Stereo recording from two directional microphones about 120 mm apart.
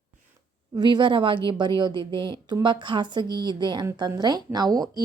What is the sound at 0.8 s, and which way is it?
A woman's voice, 40° right (ahead or behind).